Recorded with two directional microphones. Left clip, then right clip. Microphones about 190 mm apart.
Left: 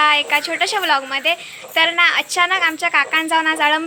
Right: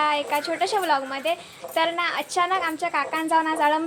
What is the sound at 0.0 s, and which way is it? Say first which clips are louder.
A woman's voice: left 8 dB; centre (ahead or behind).